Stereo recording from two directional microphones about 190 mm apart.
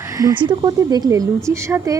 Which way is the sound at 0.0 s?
15° right (ahead or behind).